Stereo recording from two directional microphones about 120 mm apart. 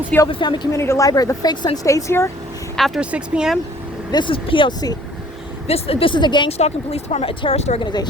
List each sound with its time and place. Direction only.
0.3 s speech: 40° left (ahead or behind)
0.7 s speech: 25° left (ahead or behind)
2.7 s speech: centre (ahead or behind)
4.1 s speech: 45° left (ahead or behind)
5.6 s speech: 55° left (ahead or behind); by 6.5 s 40° left (ahead or behind)
6.5 s speech: 60° left (ahead or behind)